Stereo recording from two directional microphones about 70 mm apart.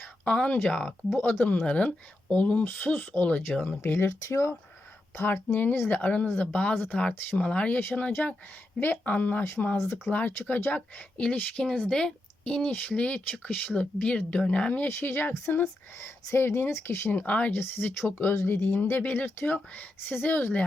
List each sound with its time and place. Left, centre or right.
0.3 s speech: centre
3.8 s speech: left
5.1 s speech: left
7.8 s speech: left
14.8 s speech: left
17.2 s speech: left
17.5 s speech: left